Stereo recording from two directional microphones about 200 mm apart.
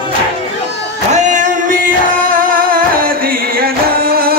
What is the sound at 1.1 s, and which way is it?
Music, 40° right (ahead or behind).